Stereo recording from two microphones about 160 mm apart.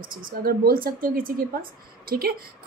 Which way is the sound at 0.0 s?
60° right (ahead or behind).